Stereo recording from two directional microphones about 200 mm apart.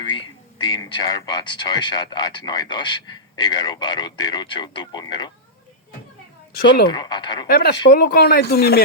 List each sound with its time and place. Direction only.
0.0 s speech: 20° left (ahead or behind)
6.5 s speech: 50° left (ahead or behind)
6.8 s speech: 20° left (ahead or behind)
7.4 s speech: 50° left (ahead or behind)